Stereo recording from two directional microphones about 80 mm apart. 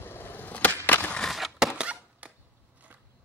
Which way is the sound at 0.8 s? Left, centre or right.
Left.